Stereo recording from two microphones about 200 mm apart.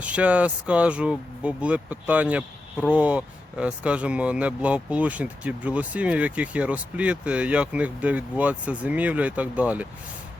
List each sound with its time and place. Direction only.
0.0 s speech: 5° right (ahead or behind)